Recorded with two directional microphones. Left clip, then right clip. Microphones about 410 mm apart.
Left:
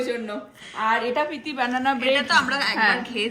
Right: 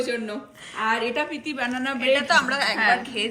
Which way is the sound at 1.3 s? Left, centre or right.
Left.